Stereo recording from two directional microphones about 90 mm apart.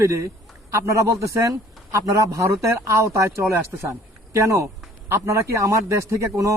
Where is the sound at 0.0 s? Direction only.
35° right (ahead or behind).